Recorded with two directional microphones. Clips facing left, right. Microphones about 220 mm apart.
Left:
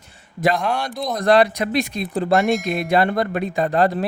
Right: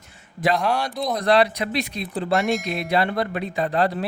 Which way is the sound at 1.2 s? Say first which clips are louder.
Left 4 dB; 45° left (ahead or behind).